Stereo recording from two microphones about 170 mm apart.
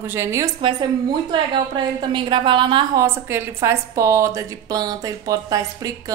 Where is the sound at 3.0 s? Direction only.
15° right (ahead or behind).